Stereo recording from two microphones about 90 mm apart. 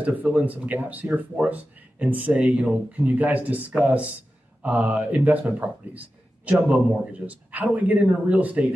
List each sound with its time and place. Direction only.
0.2 s speech: 15° right (ahead or behind)